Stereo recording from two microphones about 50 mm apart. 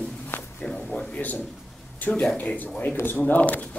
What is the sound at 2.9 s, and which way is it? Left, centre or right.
Speech, left.